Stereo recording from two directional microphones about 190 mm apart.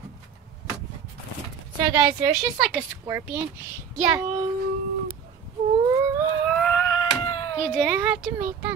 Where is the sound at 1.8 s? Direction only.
20° right (ahead or behind).